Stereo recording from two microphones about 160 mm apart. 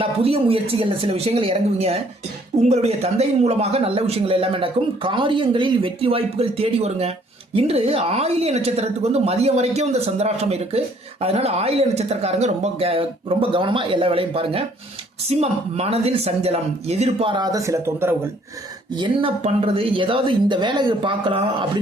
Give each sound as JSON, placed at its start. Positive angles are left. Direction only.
{"t": 0.0, "sound": "speech", "side_deg": -35}
{"t": 18.9, "sound": "speech", "side_deg": -30}
{"t": 19.4, "sound": "speech", "side_deg": -40}